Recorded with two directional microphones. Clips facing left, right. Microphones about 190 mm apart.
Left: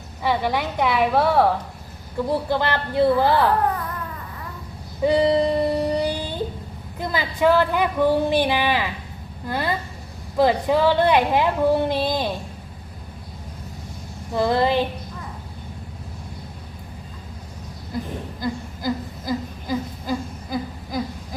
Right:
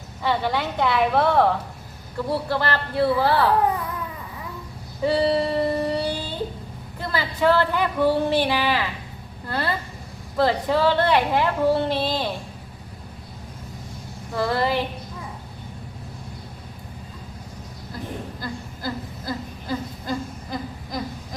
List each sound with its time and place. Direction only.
0.2 s a woman's voice: 10° left (ahead or behind)
5.0 s child singing: 15° left (ahead or behind)
7.0 s a woman's voice: 15° left (ahead or behind)
14.3 s female singing: 20° left (ahead or behind)
18.3 s a sound: 15° left (ahead or behind)